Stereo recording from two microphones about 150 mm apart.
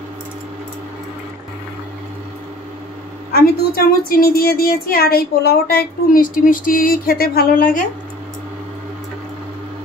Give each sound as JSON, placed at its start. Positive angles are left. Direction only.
{"t": 3.3, "sound": "a woman's voice", "side_deg": 90}